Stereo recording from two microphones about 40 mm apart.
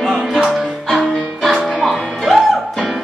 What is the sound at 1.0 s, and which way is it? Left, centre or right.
Music, centre.